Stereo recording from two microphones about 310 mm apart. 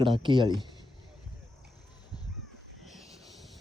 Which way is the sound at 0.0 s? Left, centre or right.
Centre.